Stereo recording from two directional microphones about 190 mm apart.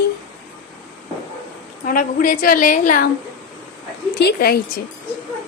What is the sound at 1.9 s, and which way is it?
A woman's voice, 45° left (ahead or behind).